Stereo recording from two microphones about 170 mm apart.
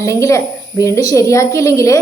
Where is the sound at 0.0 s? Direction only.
15° left (ahead or behind).